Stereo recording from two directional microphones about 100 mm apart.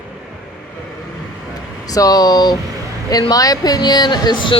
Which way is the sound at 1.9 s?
40° left (ahead or behind).